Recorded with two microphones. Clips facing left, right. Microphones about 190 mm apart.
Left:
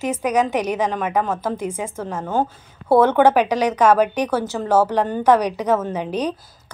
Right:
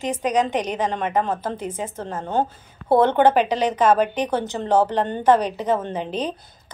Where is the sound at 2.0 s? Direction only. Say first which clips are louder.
Left 1 dB; 90° left.